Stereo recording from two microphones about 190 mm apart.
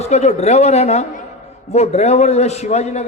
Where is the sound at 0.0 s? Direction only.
35° left (ahead or behind).